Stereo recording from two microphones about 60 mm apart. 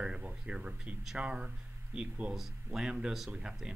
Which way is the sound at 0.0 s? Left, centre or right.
Centre.